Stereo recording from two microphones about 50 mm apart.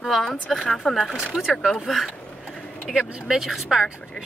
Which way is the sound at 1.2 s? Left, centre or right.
Centre.